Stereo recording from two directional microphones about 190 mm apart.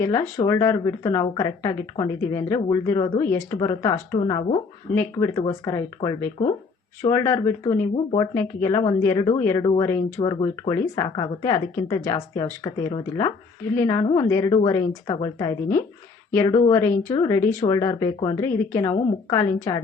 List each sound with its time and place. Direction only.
0.0 s a woman's voice: 15° left (ahead or behind)
17.1 s a woman's voice: 15° left (ahead or behind)